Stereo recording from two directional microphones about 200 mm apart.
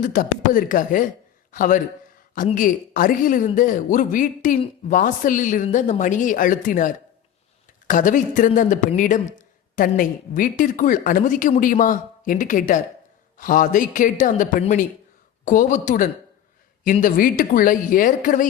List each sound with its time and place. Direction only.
0.0 s speech: 40° left (ahead or behind)